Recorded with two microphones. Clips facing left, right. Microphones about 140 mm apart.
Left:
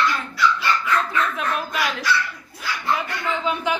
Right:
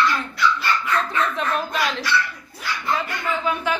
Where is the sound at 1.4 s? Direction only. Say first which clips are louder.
Right 1 dB; 5° left (ahead or behind).